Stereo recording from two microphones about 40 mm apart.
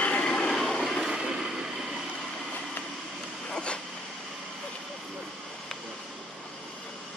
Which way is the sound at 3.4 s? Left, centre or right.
Left.